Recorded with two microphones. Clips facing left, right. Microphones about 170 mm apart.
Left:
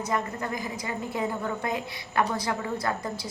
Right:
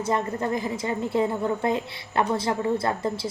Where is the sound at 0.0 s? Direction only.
25° right (ahead or behind).